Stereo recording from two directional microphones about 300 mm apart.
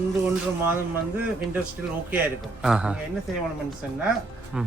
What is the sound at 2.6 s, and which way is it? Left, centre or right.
Speech, centre.